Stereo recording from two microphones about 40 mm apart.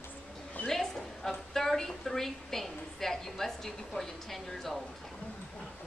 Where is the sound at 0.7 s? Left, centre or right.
Centre.